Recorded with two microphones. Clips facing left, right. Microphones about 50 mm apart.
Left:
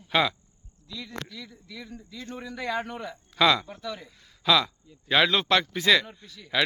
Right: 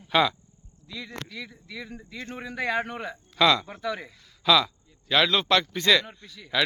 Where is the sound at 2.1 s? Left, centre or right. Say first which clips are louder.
Even; right.